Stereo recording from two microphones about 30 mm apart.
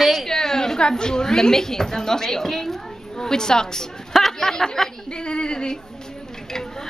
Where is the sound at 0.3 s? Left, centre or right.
Centre.